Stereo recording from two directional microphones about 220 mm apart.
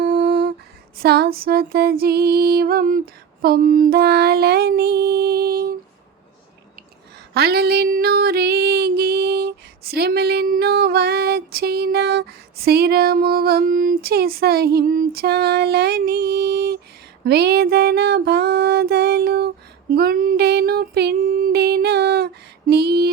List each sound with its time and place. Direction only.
0.0 s lullaby: 45° right (ahead or behind)
0.9 s music: 45° right (ahead or behind)
7.3 s music: 45° right (ahead or behind)
19.9 s child singing: 40° right (ahead or behind)